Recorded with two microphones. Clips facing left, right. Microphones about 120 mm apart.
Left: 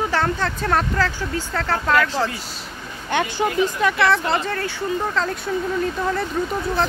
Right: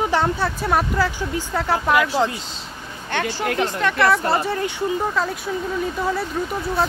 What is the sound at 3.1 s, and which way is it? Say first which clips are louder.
Speech: left 2 dB; 15° left (ahead or behind).